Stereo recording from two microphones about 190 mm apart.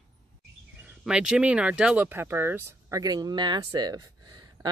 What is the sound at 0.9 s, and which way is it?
Speech, 5° right (ahead or behind).